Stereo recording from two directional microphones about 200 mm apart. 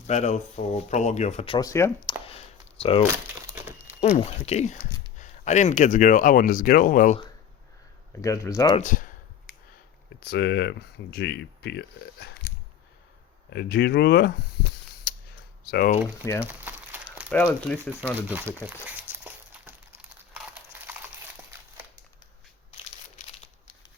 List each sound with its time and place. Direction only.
0.1 s speech: 35° left (ahead or behind)
1.5 s speech: 15° left (ahead or behind)
3.4 s crumpling: 10° right (ahead or behind)
4.1 s speech: 30° left (ahead or behind)
8.2 s speech: 15° left (ahead or behind)
8.8 s speech: 40° left (ahead or behind)
10.2 s speech: 55° left (ahead or behind)
13.5 s speech: 55° left (ahead or behind)
16.2 s speech: 15° left (ahead or behind)
16.5 s crumpling: 10° right (ahead or behind)
17.3 s speech: 10° left (ahead or behind)
18.3 s crumpling: 10° right (ahead or behind)